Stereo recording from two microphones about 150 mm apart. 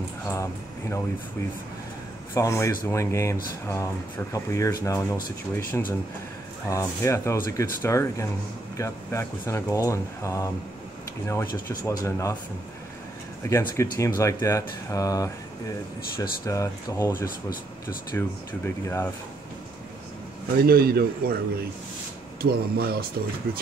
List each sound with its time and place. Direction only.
0.3 s speech: 20° left (ahead or behind)
2.3 s speech: 20° left (ahead or behind)
6.7 s speech: 20° left (ahead or behind)
13.5 s speech: 20° left (ahead or behind)
18.1 s speech: 15° left (ahead or behind)
20.5 s speech: 90° right
22.4 s speech: 90° right